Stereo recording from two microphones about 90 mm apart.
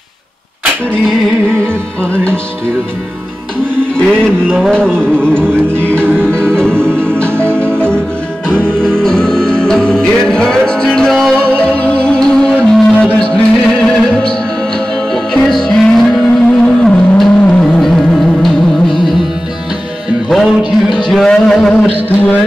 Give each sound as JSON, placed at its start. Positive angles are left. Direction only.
{"t": 1.0, "sound": "music", "side_deg": 5}
{"t": 3.9, "sound": "music", "side_deg": 10}
{"t": 6.0, "sound": "music", "side_deg": -25}
{"t": 6.3, "sound": "music", "side_deg": 10}
{"t": 8.5, "sound": "music", "side_deg": -25}
{"t": 8.8, "sound": "music", "side_deg": 10}
{"t": 15.3, "sound": "music", "side_deg": 5}
{"t": 20.2, "sound": "music", "side_deg": 0}